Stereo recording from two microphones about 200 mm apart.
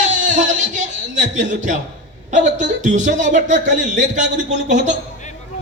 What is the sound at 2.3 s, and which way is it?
A man's voice, 40° right (ahead or behind).